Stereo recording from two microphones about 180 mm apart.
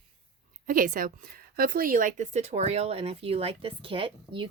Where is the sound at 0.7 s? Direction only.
50° right (ahead or behind).